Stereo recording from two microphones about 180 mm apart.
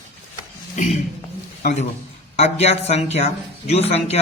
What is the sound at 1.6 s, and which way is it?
Speech, 40° left (ahead or behind).